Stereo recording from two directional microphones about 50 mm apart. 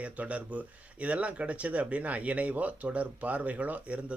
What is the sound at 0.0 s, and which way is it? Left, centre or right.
Speech, right.